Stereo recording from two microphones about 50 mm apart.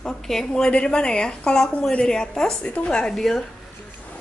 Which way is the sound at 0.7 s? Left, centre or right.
Centre.